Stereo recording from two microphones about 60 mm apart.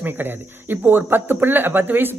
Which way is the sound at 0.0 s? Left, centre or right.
Right.